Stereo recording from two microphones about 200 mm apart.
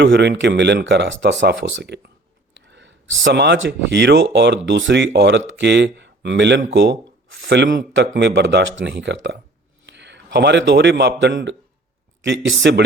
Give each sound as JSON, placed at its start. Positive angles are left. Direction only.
{"t": 0.0, "sound": "a man's voice", "side_deg": -60}